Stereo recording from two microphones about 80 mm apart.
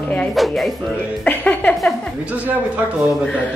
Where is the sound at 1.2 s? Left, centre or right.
Centre.